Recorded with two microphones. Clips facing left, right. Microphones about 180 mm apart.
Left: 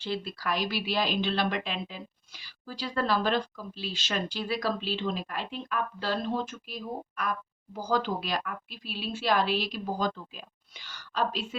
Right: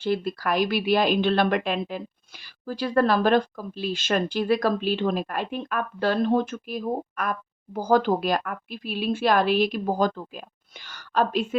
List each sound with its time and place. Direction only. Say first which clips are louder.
0.0 s speech: right 8 dB; 50° right (ahead or behind)